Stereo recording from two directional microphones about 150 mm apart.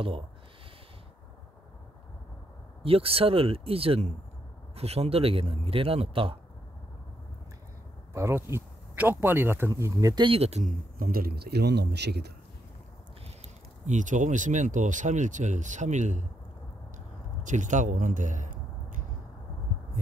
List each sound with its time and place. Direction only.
2.8 s speech: 40° right (ahead or behind)
8.1 s speech: 20° right (ahead or behind); by 10.6 s 40° right (ahead or behind)
11.0 s a man's voice: 80° right
13.8 s speech: 55° right (ahead or behind)
17.4 s a sound: 55° right (ahead or behind)